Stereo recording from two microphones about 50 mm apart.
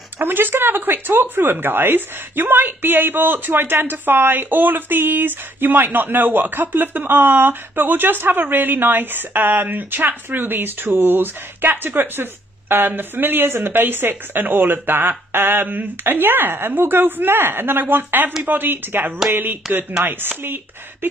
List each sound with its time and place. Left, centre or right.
0.2 s speech: right